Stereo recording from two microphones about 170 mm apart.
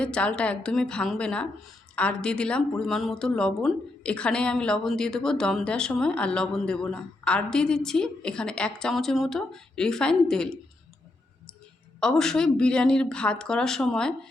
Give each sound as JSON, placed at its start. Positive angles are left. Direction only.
{"t": 0.0, "sound": "speech", "side_deg": 5}
{"t": 11.9, "sound": "speech", "side_deg": 5}